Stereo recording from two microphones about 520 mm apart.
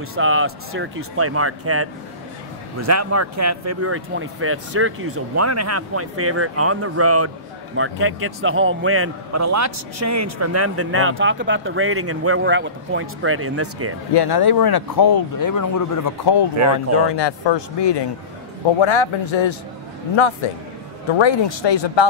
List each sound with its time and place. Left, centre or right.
0.1 s a man's voice: right
14.1 s speech: left
18.8 s speech: left